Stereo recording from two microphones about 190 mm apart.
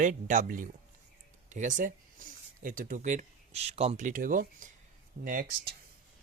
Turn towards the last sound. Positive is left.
turn(degrees=-45)  # may be behind; listen again after turning